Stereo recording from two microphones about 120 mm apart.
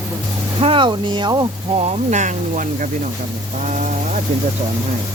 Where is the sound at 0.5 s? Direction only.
45° right (ahead or behind).